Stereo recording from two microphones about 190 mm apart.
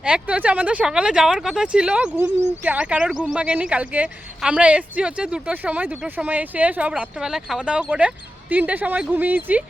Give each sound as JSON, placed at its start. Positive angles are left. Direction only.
{"t": 0.0, "sound": "speech", "side_deg": -5}